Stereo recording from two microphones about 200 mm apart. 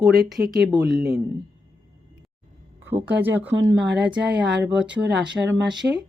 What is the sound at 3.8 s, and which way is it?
Speech, 60° right (ahead or behind).